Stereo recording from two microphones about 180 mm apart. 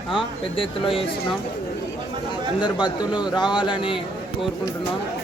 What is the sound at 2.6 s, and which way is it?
Speech, 25° left (ahead or behind).